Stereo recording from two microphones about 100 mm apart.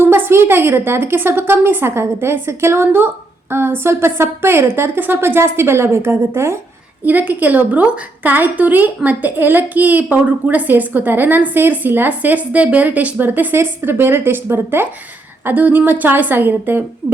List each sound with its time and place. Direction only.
0.0 s a woman's voice: 25° right (ahead or behind)